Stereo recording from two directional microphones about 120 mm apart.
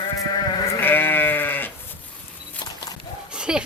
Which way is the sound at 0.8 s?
15° left (ahead or behind).